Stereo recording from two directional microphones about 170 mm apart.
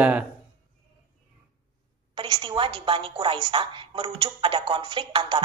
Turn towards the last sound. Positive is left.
turn(degrees=-30)  # may be behind; listen again after turning